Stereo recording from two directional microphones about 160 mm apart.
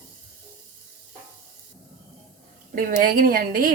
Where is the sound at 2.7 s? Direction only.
60° right (ahead or behind).